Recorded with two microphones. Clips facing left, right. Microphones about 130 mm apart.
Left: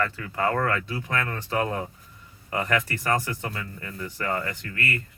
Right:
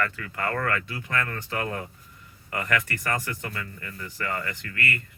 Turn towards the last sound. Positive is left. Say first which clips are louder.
# left 1 dB
turn(degrees=30)  # may be behind; listen again after turning